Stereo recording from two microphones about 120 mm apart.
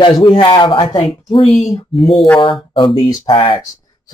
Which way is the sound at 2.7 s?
45° left (ahead or behind).